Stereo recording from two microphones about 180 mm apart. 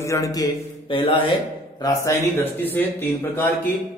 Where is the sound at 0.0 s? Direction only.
15° left (ahead or behind).